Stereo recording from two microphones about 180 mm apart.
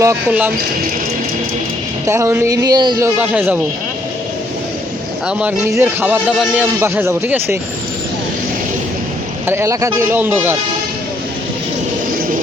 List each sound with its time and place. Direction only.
0.0 s a man's voice: 10° right (ahead or behind)
2.0 s a man's voice: 15° right (ahead or behind)
3.2 s a man's voice: 10° right (ahead or behind)
5.4 s a man's voice: 10° right (ahead or behind)
9.5 s a man's voice: 15° right (ahead or behind)